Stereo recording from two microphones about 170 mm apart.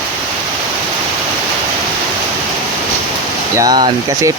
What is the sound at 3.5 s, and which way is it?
Speech, 25° right (ahead or behind).